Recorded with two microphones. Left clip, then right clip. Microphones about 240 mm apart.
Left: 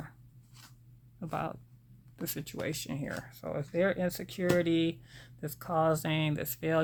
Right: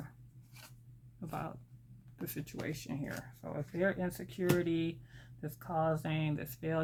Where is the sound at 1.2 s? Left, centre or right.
Left.